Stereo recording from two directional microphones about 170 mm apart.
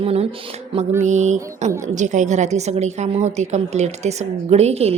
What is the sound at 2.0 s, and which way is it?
A woman's voice, 45° right (ahead or behind).